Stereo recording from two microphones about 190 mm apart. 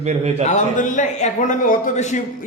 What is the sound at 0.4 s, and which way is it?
A man's voice, 40° left (ahead or behind).